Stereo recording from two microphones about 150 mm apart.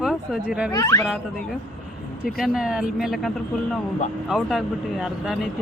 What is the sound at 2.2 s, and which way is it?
Speech, centre (ahead or behind).